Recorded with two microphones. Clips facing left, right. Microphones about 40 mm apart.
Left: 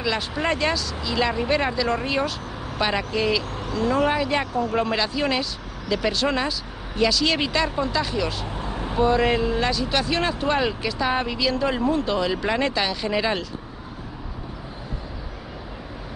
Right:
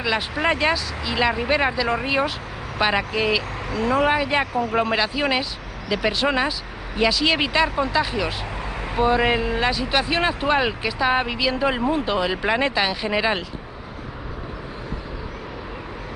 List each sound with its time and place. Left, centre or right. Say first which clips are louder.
0.0 s speech: right 2 dB; centre